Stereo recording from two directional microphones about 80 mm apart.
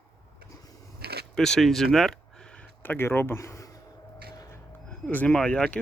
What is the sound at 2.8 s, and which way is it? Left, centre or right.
Speech, left.